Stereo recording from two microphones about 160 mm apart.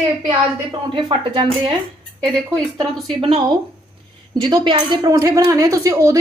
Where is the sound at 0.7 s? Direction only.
30° right (ahead or behind).